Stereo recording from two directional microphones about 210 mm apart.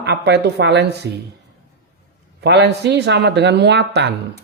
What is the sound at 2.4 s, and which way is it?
Speech, 50° right (ahead or behind).